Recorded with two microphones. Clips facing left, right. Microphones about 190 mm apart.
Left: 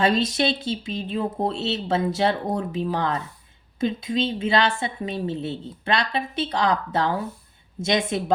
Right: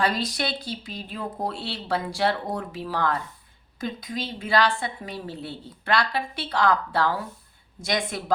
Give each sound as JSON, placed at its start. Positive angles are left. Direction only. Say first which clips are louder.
{"t": 0.0, "sound": "a woman's voice", "louder": "left 5 dB", "side_deg": 25}